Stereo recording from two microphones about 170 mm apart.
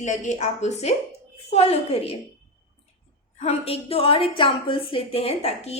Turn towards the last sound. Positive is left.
turn(degrees=35)  # may be behind; listen again after turning